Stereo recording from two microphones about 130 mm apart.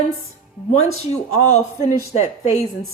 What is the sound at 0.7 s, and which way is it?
Speech, 60° left (ahead or behind).